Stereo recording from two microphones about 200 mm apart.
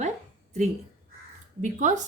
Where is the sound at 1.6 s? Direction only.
40° right (ahead or behind).